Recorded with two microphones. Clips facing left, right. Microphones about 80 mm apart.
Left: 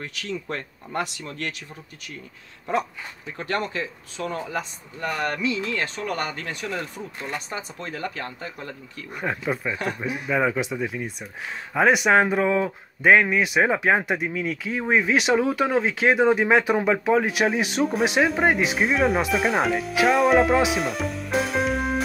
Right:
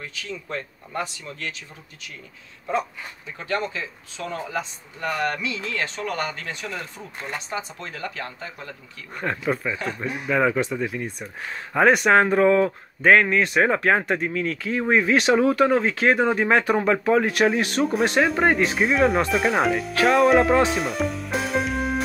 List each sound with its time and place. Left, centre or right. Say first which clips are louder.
0.0 s speech: left 3 dB; left
3.7 s speech: left 3 dB; left
7.5 s speech: right 1 dB; left
9.1 s speech: right 2 dB; centre